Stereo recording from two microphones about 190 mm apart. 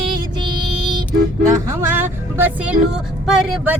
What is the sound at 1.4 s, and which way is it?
Speech, 15° right (ahead or behind).